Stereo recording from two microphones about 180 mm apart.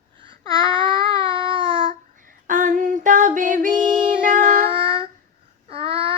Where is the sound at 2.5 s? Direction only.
50° right (ahead or behind).